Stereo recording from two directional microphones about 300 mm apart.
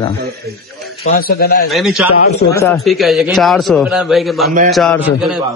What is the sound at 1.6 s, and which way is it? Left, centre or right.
A man's voice, centre.